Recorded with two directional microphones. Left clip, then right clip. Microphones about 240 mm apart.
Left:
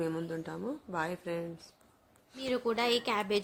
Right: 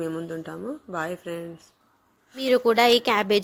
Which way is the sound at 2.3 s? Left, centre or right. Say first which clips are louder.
Right 13 dB; right.